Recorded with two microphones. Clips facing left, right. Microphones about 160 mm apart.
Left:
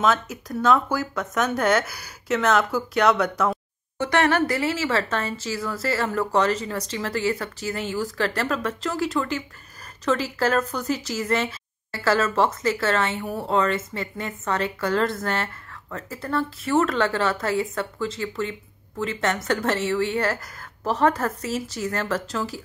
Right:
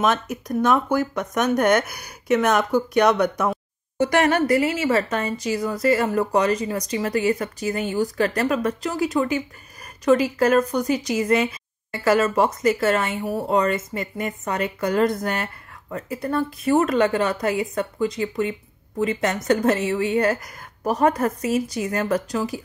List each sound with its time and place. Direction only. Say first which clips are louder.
0.0 s speech: right 1 dB; 15° right (ahead or behind)
5.1 s speech: right 3 dB; 15° right (ahead or behind)